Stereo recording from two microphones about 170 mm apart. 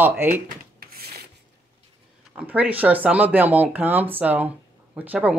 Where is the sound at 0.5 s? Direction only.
60° right (ahead or behind).